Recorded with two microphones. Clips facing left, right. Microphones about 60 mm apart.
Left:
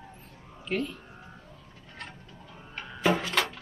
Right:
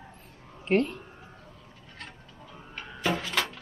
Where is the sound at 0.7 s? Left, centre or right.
Right.